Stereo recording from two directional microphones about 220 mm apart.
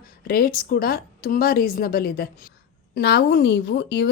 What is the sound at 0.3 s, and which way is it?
Speech, 45° left (ahead or behind).